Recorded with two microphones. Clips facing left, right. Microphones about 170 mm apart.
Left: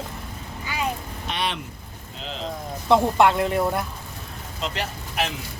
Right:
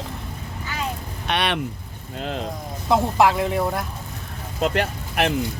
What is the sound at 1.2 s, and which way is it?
Speech, 70° right (ahead or behind).